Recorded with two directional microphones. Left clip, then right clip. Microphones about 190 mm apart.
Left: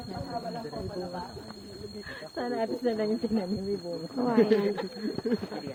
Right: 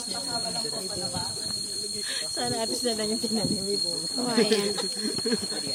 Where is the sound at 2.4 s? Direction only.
25° left (ahead or behind).